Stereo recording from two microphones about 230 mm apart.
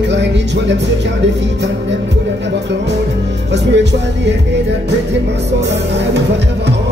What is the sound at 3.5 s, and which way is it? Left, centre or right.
Music, right.